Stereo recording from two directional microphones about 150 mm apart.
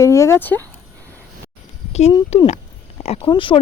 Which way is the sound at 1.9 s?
45° left (ahead or behind).